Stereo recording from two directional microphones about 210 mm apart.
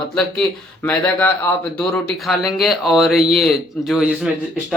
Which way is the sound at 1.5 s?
5° left (ahead or behind).